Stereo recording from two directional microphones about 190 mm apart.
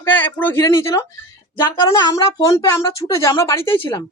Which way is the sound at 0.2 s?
10° left (ahead or behind).